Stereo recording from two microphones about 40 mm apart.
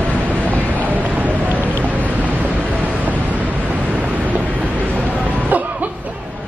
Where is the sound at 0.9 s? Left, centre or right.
Right.